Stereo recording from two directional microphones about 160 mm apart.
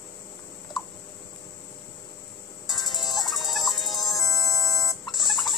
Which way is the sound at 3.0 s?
25° left (ahead or behind).